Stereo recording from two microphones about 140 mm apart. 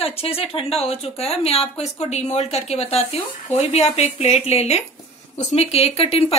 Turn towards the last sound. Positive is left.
turn(degrees=45)  # may be behind; listen again after turning